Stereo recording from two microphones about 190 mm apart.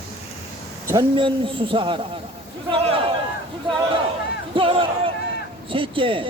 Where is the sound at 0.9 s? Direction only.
25° right (ahead or behind).